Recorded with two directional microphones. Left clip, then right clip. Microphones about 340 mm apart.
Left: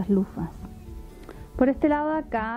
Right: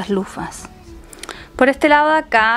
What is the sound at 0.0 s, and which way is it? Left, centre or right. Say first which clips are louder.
A woman's voice: right 6 dB; centre.